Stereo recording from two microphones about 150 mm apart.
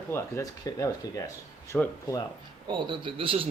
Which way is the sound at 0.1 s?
20° left (ahead or behind).